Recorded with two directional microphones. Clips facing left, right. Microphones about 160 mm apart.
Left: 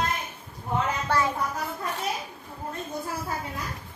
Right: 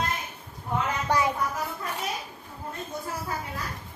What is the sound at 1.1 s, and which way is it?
Speech, 15° right (ahead or behind).